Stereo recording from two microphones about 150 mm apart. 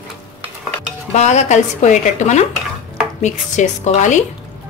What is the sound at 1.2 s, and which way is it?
Speech, 50° left (ahead or behind).